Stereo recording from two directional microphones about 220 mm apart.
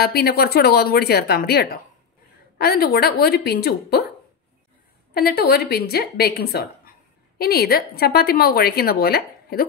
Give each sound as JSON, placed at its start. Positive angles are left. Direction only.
{"t": 0.0, "sound": "a woman's voice", "side_deg": 45}
{"t": 5.1, "sound": "a woman's voice", "side_deg": 45}